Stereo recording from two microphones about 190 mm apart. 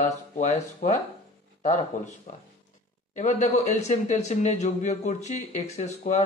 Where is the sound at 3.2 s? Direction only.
40° left (ahead or behind).